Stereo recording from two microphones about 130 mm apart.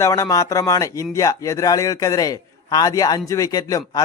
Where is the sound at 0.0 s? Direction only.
25° left (ahead or behind).